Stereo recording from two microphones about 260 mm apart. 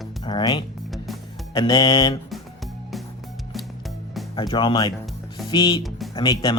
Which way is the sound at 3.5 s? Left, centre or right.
Centre.